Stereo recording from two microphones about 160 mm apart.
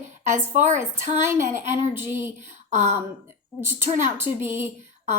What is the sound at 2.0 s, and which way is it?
Speech, 15° right (ahead or behind).